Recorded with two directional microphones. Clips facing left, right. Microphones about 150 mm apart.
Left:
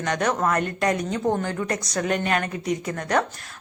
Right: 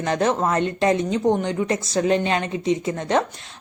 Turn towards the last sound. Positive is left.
turn(degrees=-25)  # may be behind; listen again after turning